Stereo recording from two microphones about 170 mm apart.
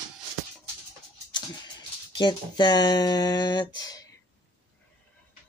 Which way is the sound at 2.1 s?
25° left (ahead or behind).